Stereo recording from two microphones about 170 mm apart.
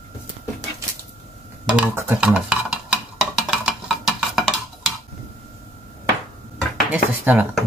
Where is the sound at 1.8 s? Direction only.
10° right (ahead or behind).